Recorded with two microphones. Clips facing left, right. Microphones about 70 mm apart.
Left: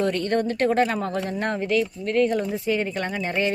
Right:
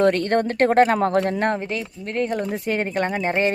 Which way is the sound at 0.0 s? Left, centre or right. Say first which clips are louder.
Right 4 dB; right.